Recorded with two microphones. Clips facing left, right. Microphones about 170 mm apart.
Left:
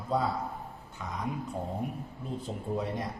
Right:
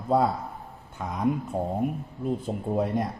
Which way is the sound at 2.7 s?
55° right (ahead or behind).